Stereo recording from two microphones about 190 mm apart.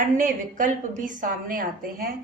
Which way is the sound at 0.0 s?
45° right (ahead or behind).